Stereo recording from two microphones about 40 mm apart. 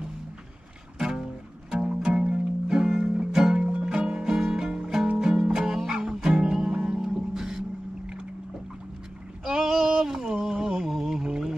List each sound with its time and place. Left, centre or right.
0.9 s music: centre
2.0 s music: centre
9.4 s a sound: centre
9.8 s music: centre